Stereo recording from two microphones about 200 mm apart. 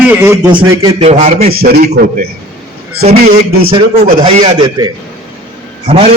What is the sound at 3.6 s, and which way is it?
A man's voice, 25° right (ahead or behind).